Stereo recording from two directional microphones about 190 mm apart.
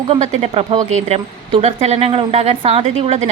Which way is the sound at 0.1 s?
30° right (ahead or behind).